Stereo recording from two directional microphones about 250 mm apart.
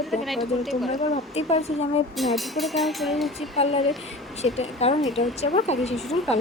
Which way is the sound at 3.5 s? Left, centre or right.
Left.